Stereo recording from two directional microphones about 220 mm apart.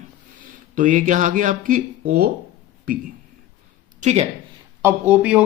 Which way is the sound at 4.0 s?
30° right (ahead or behind).